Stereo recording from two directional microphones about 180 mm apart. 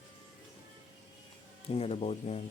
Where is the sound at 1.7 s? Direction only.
35° left (ahead or behind).